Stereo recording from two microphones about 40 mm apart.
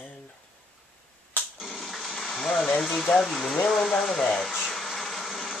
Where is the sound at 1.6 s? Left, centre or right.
Centre.